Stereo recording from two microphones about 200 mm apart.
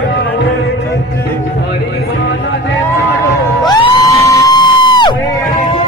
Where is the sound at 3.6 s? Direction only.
20° left (ahead or behind).